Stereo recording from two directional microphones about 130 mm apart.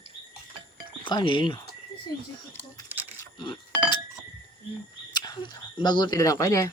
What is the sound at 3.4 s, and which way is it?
Speech, 35° left (ahead or behind).